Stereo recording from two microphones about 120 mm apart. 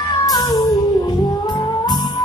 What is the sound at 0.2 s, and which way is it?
Music, 35° left (ahead or behind).